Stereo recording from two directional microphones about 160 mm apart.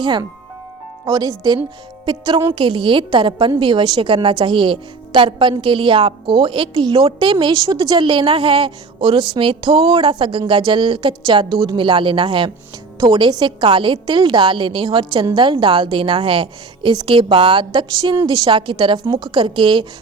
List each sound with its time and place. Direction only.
0.0 s a woman's voice: 30° right (ahead or behind)